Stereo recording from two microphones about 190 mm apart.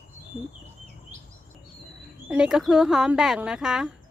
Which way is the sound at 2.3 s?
5° right (ahead or behind).